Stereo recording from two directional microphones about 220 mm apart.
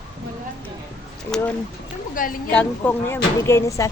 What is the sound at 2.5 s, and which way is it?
Speech, 5° left (ahead or behind).